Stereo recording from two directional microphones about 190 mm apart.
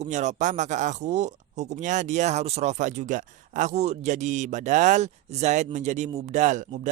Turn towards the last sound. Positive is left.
turn(degrees=-35)  # may be behind; listen again after turning